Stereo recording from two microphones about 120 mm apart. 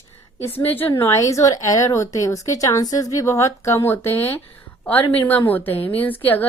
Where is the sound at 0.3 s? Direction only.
20° left (ahead or behind).